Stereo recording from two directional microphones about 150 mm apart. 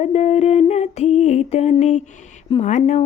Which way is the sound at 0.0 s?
50° left (ahead or behind).